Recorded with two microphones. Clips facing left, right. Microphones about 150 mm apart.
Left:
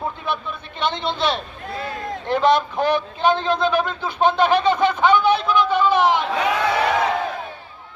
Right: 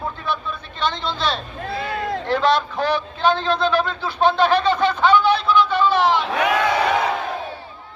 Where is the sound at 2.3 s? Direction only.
20° left (ahead or behind).